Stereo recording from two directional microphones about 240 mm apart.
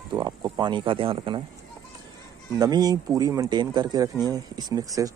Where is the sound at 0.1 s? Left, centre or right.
Centre.